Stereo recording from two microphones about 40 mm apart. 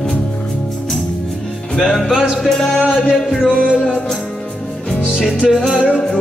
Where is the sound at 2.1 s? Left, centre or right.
Right.